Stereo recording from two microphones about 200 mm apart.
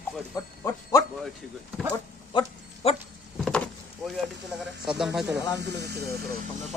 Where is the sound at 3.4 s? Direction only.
5° left (ahead or behind).